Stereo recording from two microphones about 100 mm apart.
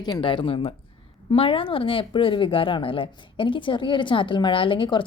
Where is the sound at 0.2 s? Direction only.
60° left (ahead or behind).